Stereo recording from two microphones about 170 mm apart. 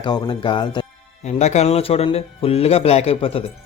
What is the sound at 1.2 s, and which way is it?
A man's voice, 40° left (ahead or behind).